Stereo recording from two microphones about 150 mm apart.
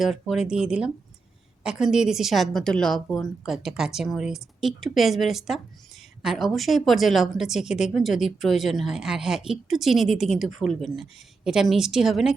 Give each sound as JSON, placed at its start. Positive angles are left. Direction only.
{"t": 0.0, "sound": "a woman's voice", "side_deg": 0}